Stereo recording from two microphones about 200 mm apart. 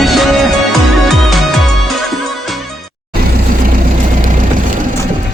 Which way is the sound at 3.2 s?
45° right (ahead or behind).